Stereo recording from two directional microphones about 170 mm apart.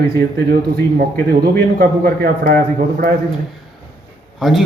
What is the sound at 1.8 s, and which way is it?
Speech, 60° right (ahead or behind).